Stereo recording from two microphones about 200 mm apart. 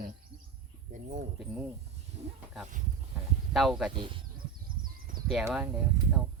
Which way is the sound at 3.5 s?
Centre (ahead or behind).